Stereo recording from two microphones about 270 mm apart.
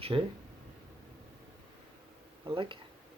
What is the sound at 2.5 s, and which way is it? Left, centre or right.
Speech, centre.